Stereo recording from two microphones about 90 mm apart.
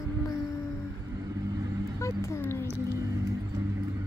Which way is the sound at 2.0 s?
35° left (ahead or behind).